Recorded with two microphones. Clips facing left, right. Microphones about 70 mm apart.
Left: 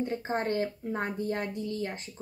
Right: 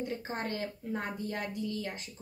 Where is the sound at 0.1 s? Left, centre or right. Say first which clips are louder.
Left 6 dB; left.